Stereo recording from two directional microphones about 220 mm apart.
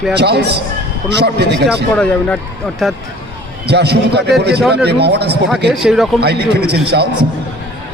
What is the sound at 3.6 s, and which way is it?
Speech, 50° right (ahead or behind).